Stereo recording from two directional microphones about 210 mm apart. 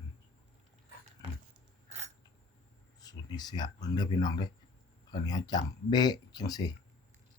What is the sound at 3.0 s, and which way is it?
Speech, 20° left (ahead or behind).